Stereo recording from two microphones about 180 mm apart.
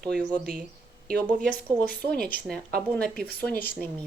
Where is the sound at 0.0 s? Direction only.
5° left (ahead or behind).